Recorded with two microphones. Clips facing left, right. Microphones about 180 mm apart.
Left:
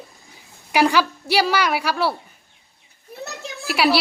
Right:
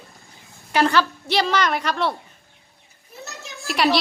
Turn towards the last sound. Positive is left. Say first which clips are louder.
# left 1 dB
turn(degrees=5)  # may be behind; listen again after turning